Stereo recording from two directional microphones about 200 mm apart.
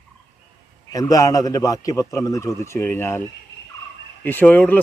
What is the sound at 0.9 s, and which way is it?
Speech, 20° left (ahead or behind).